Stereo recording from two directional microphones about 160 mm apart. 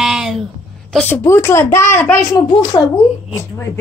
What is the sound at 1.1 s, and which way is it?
A woman's voice, 15° left (ahead or behind).